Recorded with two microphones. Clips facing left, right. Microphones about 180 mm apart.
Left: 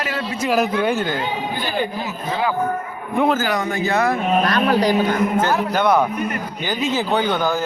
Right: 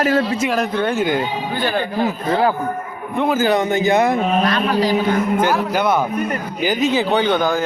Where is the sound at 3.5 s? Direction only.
20° right (ahead or behind).